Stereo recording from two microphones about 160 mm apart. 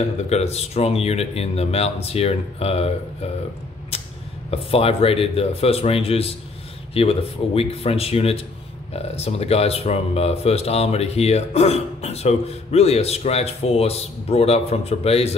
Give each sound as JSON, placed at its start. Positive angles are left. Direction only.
{"t": 0.3, "sound": "speech", "side_deg": 40}
{"t": 3.9, "sound": "a sound", "side_deg": 35}
{"t": 4.5, "sound": "speech", "side_deg": 35}